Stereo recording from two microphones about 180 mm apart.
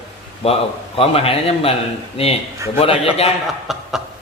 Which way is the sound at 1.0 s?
30° left (ahead or behind).